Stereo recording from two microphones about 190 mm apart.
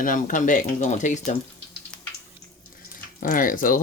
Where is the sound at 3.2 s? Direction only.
45° left (ahead or behind).